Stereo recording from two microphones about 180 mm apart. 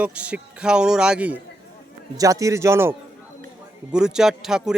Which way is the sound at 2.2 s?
20° right (ahead or behind).